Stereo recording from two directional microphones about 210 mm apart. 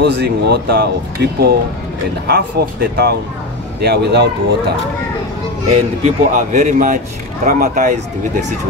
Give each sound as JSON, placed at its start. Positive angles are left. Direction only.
{"t": 0.0, "sound": "speech", "side_deg": -55}
{"t": 5.7, "sound": "a man's voice", "side_deg": -35}